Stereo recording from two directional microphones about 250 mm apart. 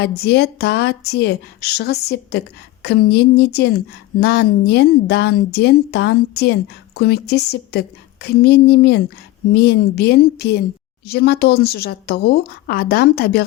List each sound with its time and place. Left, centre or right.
0.0 s speech: left